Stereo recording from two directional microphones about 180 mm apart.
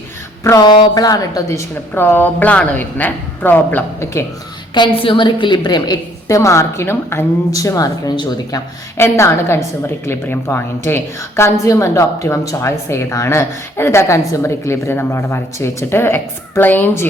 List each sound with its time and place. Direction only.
0.4 s a woman's voice: 20° left (ahead or behind)
4.7 s a woman's voice: 25° left (ahead or behind)